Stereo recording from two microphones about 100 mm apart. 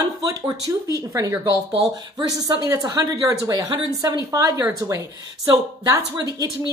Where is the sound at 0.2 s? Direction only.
35° right (ahead or behind).